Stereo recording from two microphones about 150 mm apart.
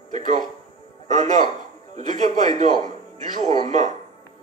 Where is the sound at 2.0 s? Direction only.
50° right (ahead or behind).